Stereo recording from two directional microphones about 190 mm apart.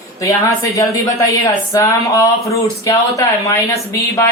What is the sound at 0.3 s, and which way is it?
Speech, 15° left (ahead or behind).